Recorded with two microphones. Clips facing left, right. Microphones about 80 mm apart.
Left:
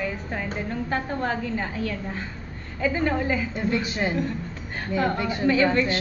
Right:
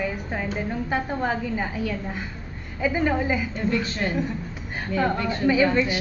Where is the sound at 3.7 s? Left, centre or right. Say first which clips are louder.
Even; centre.